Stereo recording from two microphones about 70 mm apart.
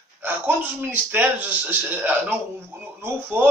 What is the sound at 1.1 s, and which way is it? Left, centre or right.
Speech, right.